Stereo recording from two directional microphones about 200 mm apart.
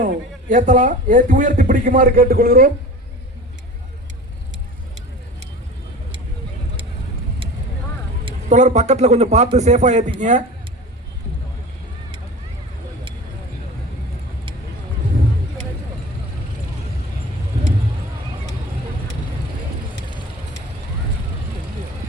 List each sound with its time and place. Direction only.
0.0 s a man's voice: 40° right (ahead or behind)
8.2 s a man's voice: 35° right (ahead or behind)